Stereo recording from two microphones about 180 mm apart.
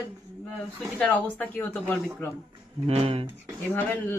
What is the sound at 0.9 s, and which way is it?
Speech, 5° left (ahead or behind).